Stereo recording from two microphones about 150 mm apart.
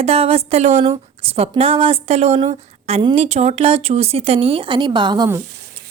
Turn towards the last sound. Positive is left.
turn(degrees=-30)  # may be behind; listen again after turning